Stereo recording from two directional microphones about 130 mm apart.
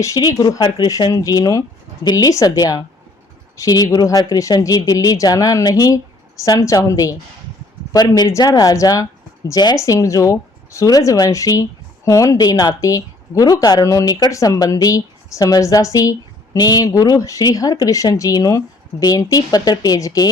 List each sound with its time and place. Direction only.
0.0 s speech: 25° left (ahead or behind)